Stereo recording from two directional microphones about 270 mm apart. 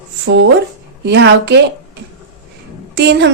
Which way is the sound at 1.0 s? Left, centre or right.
Right.